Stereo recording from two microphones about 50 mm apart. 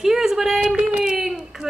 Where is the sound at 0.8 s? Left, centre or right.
Centre.